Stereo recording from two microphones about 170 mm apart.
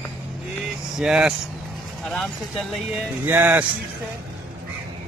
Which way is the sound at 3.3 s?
10° right (ahead or behind).